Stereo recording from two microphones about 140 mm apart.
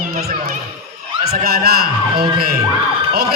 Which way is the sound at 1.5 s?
90° right.